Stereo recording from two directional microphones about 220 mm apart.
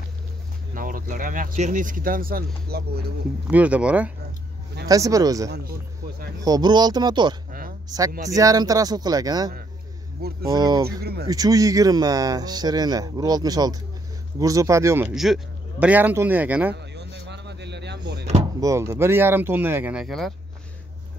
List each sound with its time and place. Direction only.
0.7 s speech: 40° right (ahead or behind)
3.4 s speech: 5° right (ahead or behind)
10.2 s speech: 45° right (ahead or behind)
10.5 s speech: 15° right (ahead or behind)
15.1 s speech: centre (ahead or behind)
16.7 s a sound: 50° right (ahead or behind)
18.6 s speech: 15° right (ahead or behind)